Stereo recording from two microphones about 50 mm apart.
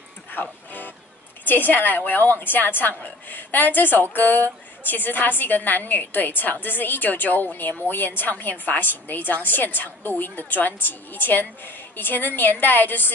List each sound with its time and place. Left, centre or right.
0.3 s music: left
1.4 s a woman's voice: left